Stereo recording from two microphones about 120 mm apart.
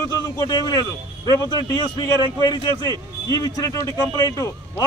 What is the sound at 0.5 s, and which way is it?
Speech, 35° left (ahead or behind).